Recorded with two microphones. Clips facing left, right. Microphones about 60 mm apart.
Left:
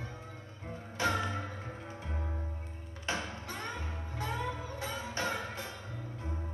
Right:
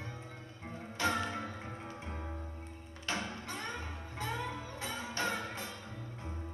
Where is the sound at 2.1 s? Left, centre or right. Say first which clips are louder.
Left 2 dB; centre.